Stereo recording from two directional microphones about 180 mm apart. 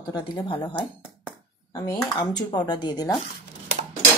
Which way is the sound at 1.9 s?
25° left (ahead or behind).